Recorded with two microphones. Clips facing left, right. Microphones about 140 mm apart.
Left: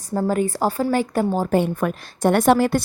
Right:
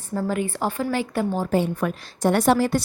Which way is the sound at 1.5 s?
55° left (ahead or behind).